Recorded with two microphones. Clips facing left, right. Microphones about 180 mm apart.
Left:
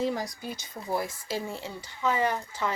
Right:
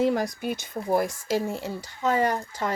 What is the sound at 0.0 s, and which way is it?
Speech, 55° right (ahead or behind).